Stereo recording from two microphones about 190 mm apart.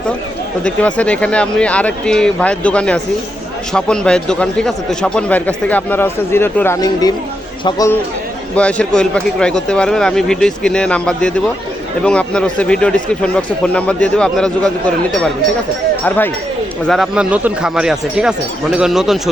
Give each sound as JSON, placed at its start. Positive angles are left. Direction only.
{"t": 0.6, "sound": "a man's voice", "side_deg": 5}
{"t": 8.5, "sound": "a man's voice", "side_deg": 5}
{"t": 16.8, "sound": "a man's voice", "side_deg": 0}